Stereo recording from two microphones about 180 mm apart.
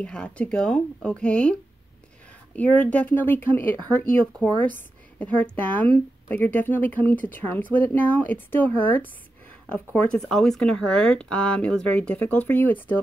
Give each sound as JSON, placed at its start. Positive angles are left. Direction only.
{"t": 0.0, "sound": "speech", "side_deg": 5}